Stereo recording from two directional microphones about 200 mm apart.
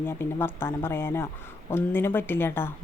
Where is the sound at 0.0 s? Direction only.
10° left (ahead or behind).